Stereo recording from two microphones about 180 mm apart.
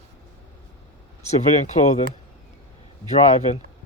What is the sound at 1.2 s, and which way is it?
Speech, 40° left (ahead or behind).